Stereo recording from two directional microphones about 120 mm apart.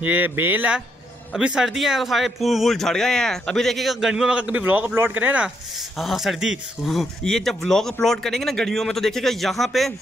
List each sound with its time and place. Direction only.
0.0 s speech: 15° right (ahead or behind)
5.9 s speech: centre (ahead or behind)